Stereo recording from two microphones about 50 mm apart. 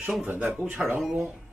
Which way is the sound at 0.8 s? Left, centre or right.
Centre.